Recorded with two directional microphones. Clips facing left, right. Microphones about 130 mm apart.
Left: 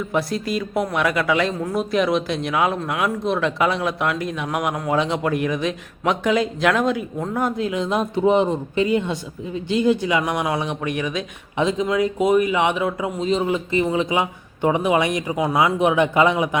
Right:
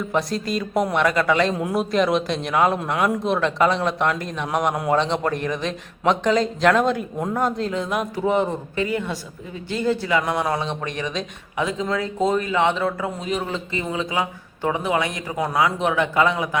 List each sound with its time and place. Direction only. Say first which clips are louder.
0.1 s a man's voice: left 1 dB; 5° left (ahead or behind)
1.5 s a man's voice: right 1 dB; 10° right (ahead or behind)
1.8 s a man's voice: left 1 dB; centre (ahead or behind)
7.7 s speech: left 2 dB; 20° left (ahead or behind)
11.5 s speech: left 4 dB; 25° left (ahead or behind)